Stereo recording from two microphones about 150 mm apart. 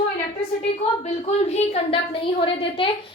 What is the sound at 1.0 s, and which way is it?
A woman's voice, 45° left (ahead or behind).